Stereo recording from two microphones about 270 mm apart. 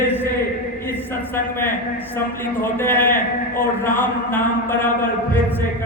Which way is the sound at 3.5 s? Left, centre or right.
Left.